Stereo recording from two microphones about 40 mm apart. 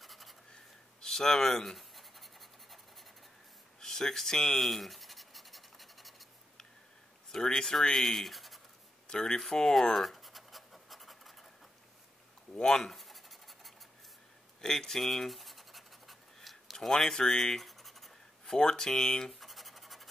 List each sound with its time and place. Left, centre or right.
0.0 s a sound: centre
1.0 s scratch: centre
3.8 s scratch: centre
7.3 s speech: centre
9.1 s speech: centre
9.9 s scratch: centre
12.5 s speech: centre
12.8 s scratch: centre
16.7 s speech: centre
18.5 s speech: centre
19.4 s scratch: centre